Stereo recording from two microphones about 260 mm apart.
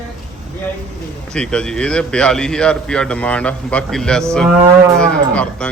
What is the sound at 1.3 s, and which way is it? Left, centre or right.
A man's voice, centre.